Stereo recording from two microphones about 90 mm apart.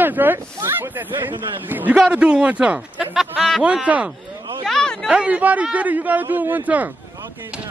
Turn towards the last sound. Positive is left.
turn(degrees=-20)  # may be behind; listen again after turning